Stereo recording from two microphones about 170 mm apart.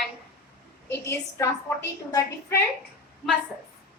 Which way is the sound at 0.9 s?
15° left (ahead or behind).